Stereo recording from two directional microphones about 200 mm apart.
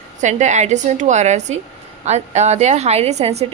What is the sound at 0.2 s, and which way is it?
A woman's voice, 35° right (ahead or behind).